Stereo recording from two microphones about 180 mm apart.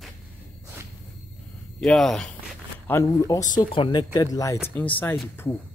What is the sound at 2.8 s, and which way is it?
Speech, 15° left (ahead or behind).